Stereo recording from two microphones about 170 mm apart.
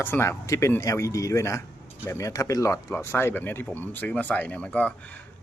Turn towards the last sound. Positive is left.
turn(degrees=10)  # may be behind; listen again after turning